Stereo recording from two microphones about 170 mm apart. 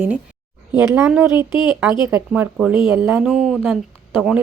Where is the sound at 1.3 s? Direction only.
25° left (ahead or behind).